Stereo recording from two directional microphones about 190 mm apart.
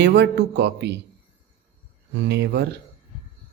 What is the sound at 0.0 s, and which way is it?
Speech, 65° right (ahead or behind).